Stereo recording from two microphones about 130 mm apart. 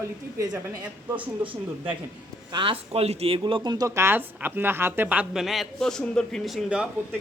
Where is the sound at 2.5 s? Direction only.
40° right (ahead or behind).